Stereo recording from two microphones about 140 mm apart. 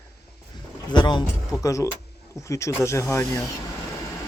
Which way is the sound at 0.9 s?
30° left (ahead or behind).